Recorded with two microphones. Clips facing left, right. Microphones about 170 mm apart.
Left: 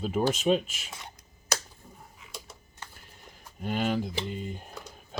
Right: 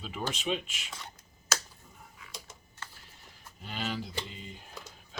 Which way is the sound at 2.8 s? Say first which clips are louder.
Left 1 dB; 15° left (ahead or behind).